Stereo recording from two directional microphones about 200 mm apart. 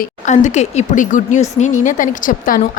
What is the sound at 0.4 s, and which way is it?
Speech, 35° left (ahead or behind).